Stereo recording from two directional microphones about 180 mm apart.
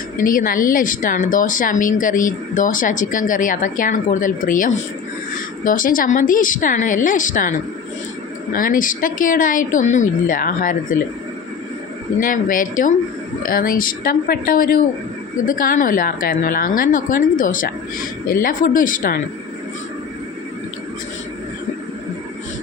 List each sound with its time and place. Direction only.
0.2 s speech: 50° left (ahead or behind)
8.5 s speech: 50° left (ahead or behind)
12.2 s speech: 50° left (ahead or behind)